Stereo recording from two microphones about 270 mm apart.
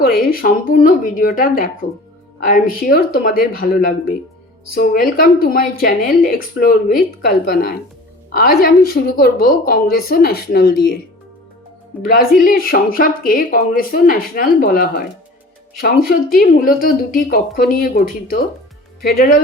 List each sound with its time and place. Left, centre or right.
0.0 s speech: left
12.0 s speech: left